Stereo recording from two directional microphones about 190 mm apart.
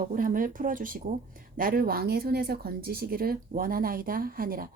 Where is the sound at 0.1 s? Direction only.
45° right (ahead or behind).